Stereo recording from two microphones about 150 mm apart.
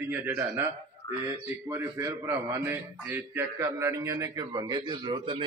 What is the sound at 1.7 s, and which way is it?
A man's voice, 20° right (ahead or behind).